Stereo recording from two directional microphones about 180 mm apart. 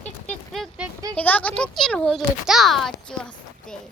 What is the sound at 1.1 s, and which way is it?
Speech, 10° left (ahead or behind).